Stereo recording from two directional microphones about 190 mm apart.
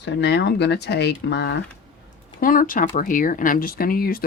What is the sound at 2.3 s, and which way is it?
Speech, 45° left (ahead or behind).